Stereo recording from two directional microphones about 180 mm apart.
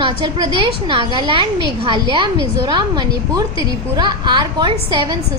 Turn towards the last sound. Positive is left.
turn(degrees=-25)  # may be behind; listen again after turning